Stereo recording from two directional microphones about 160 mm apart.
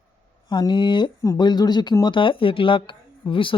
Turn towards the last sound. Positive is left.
turn(degrees=30)  # may be behind; listen again after turning